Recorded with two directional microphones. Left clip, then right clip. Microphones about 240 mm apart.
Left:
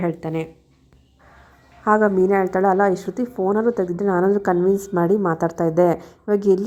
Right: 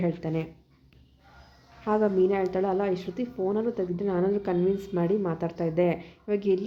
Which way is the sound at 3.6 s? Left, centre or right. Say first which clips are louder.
Left 9 dB; centre.